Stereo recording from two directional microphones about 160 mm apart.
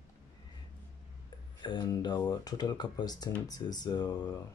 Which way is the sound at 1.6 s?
30° left (ahead or behind).